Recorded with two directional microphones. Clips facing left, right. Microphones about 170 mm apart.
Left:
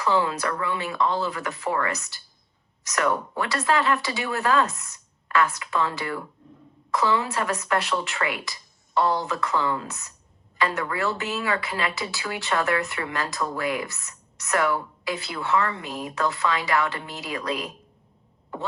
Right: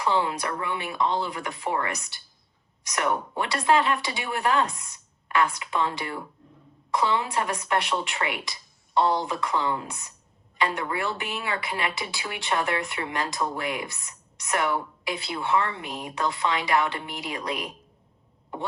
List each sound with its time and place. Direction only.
0.0 s speech: 25° right (ahead or behind)